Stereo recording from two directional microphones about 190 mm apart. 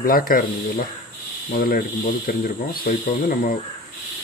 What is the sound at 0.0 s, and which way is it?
Speech, 50° left (ahead or behind).